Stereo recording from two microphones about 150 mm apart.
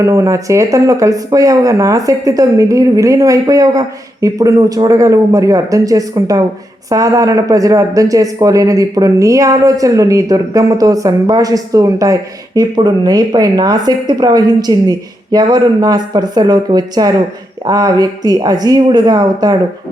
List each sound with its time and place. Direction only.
0.0 s speech: 20° right (ahead or behind)